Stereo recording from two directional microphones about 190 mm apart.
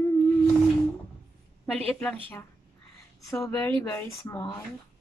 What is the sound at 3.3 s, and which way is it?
Speech, 15° left (ahead or behind).